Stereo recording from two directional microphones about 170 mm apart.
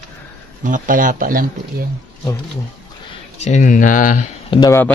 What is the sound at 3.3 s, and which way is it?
Speech, 45° left (ahead or behind).